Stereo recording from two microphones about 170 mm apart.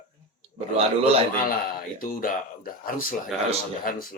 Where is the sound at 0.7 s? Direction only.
35° right (ahead or behind).